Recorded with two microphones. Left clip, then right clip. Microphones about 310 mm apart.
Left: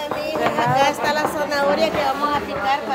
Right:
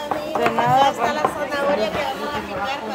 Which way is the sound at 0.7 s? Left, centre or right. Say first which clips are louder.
Right 1 dB; left.